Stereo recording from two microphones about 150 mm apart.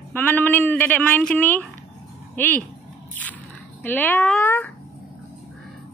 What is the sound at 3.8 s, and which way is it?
Speech, 10° left (ahead or behind).